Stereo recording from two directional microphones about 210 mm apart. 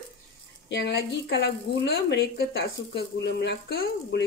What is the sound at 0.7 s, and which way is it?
A woman's voice, 55° left (ahead or behind).